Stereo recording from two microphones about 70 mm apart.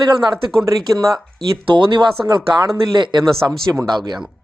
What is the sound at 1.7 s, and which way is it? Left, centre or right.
Speech, right.